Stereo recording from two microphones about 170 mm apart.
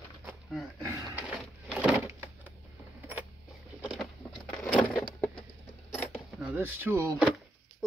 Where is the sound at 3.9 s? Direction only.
Centre (ahead or behind).